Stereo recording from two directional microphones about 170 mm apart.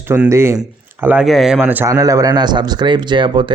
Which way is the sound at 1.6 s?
10° right (ahead or behind).